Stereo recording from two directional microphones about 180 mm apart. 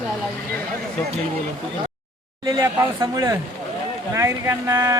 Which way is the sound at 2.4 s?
15° right (ahead or behind).